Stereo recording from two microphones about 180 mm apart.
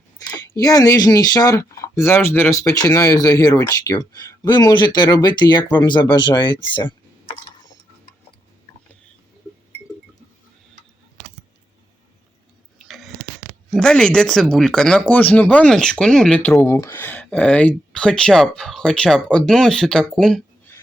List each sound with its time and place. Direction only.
0.2 s speech: 20° left (ahead or behind)
12.8 s a sound: centre (ahead or behind)
13.7 s speech: 5° left (ahead or behind)